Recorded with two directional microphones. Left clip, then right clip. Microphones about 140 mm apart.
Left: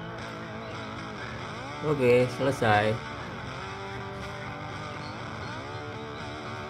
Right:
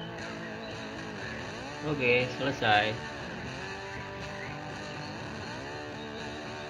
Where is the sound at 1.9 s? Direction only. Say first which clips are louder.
Left 4 dB; 45° left (ahead or behind).